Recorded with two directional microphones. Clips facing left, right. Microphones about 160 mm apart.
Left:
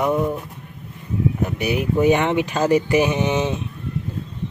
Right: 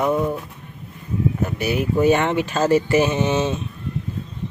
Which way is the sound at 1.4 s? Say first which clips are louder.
Even; 15° left (ahead or behind).